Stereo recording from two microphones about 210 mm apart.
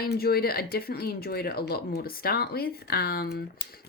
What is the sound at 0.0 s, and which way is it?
Speech, 50° left (ahead or behind).